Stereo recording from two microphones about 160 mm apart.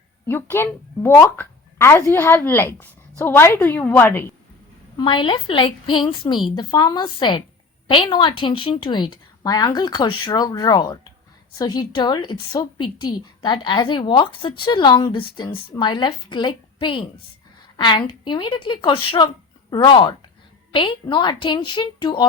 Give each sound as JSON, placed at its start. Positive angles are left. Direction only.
{"t": 0.3, "sound": "a woman's voice", "side_deg": 15}
{"t": 4.9, "sound": "a woman's voice", "side_deg": 30}